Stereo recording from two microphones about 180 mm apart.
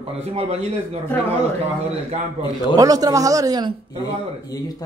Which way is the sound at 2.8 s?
20° right (ahead or behind).